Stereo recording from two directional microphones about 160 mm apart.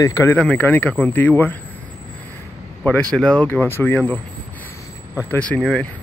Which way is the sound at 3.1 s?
5° left (ahead or behind).